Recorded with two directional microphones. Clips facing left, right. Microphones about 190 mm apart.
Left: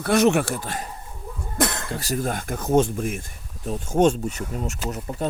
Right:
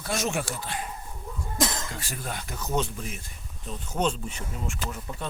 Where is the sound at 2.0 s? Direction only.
40° left (ahead or behind).